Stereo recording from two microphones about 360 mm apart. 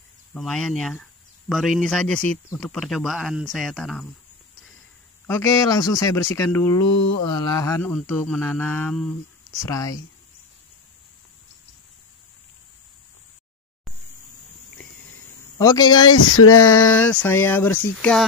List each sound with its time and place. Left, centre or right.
0.3 s mantra: centre
5.2 s speech: centre
7.2 s mantra: centre
9.7 s speech: centre
15.5 s speech: centre
16.1 s a sound: left
16.9 s mantra: centre